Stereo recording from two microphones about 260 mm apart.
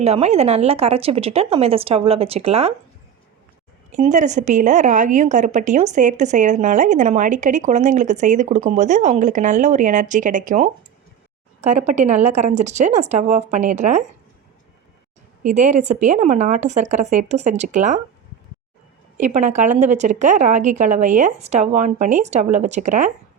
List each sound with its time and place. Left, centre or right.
0.0 s a woman's voice: right
3.9 s a woman's voice: right
15.4 s a woman's voice: right
19.1 s a woman's voice: right